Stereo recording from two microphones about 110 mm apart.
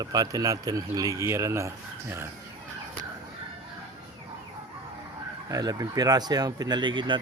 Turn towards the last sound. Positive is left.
turn(degrees=-45)  # may be behind; listen again after turning